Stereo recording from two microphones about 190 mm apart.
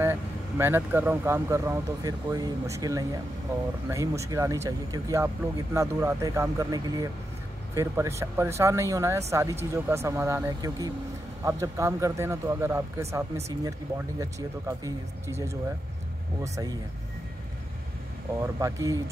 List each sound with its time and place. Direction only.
0.0 s speech: 10° right (ahead or behind)
18.4 s speech: 15° right (ahead or behind)